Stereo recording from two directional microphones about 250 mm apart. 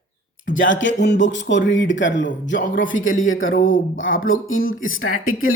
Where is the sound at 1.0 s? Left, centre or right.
Left.